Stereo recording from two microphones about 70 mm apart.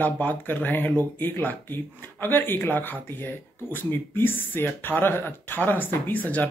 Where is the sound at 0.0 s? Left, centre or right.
Left.